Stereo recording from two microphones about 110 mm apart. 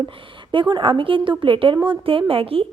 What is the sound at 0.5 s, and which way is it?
A woman's voice, 45° right (ahead or behind).